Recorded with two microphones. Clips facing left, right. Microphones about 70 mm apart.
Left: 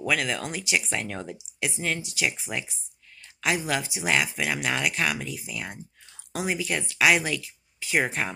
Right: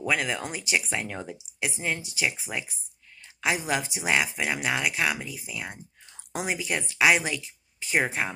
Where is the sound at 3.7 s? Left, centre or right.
Right.